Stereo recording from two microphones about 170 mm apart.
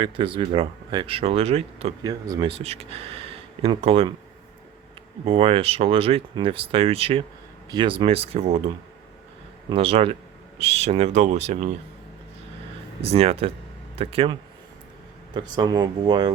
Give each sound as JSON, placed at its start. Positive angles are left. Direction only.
{"t": 0.0, "sound": "speech", "side_deg": -30}
{"t": 2.0, "sound": "speech", "side_deg": -20}
{"t": 2.5, "sound": "speech", "side_deg": -35}
{"t": 5.2, "sound": "speech", "side_deg": -35}
{"t": 13.0, "sound": "speech", "side_deg": -35}